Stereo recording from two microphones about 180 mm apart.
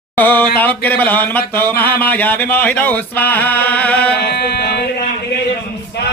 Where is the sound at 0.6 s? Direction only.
10° left (ahead or behind).